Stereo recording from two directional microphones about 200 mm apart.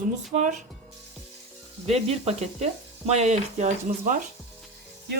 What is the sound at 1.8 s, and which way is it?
Frying, 30° right (ahead or behind).